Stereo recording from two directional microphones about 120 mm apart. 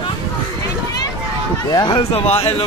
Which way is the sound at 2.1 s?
55° left (ahead or behind).